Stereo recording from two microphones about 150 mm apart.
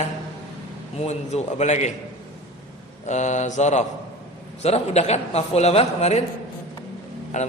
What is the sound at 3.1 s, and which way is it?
A man's voice, 50° left (ahead or behind).